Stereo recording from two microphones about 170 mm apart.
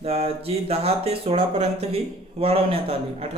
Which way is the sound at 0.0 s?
35° right (ahead or behind).